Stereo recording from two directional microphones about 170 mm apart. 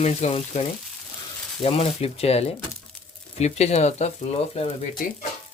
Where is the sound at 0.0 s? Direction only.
40° left (ahead or behind).